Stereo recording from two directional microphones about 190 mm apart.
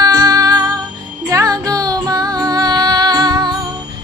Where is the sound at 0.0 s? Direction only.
20° right (ahead or behind).